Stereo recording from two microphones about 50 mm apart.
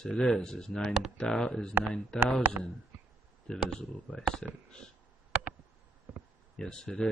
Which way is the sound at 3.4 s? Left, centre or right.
Centre.